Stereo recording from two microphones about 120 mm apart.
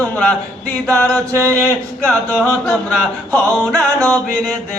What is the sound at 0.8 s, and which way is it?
Music, 25° right (ahead or behind).